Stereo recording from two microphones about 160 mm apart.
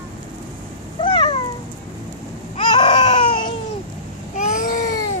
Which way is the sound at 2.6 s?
30° left (ahead or behind).